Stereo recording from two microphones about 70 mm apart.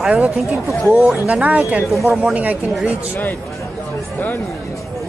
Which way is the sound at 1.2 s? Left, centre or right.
Right.